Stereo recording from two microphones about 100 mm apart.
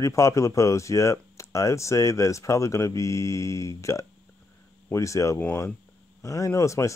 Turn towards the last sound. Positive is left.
turn(degrees=30)  # may be behind; listen again after turning